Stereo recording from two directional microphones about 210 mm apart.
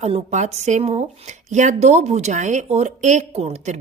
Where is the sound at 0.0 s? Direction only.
35° right (ahead or behind).